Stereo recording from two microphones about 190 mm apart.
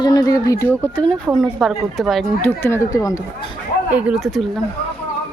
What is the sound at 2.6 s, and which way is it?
Speech, 15° left (ahead or behind).